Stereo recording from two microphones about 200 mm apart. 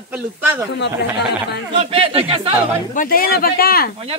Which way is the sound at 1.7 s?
25° right (ahead or behind).